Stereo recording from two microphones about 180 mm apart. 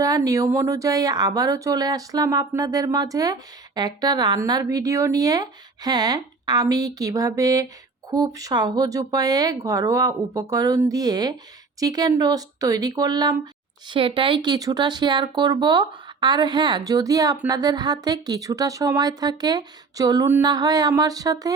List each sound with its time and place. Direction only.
0.0 s speech: 20° right (ahead or behind)